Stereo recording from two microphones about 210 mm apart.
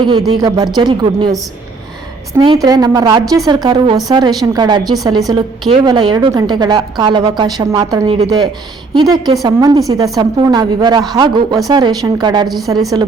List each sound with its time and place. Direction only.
0.3 s a woman's voice: 20° right (ahead or behind)
2.4 s a woman's voice: 20° right (ahead or behind)